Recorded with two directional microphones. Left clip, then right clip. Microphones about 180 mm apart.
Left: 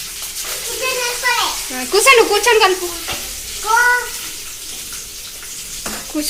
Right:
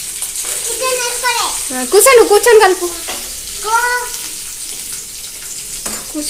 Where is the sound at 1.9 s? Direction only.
45° right (ahead or behind).